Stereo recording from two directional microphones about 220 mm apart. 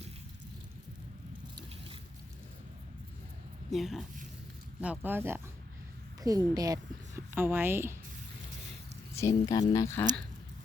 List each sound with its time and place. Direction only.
1.5 s a sound: 25° right (ahead or behind)
3.7 s a woman's voice: centre (ahead or behind)
9.1 s speech: 15° left (ahead or behind)